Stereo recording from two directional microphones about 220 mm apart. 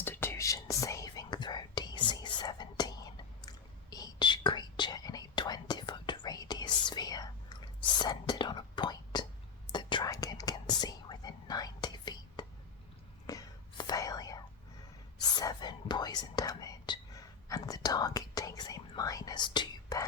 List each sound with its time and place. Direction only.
0.0 s whispering: 10° left (ahead or behind)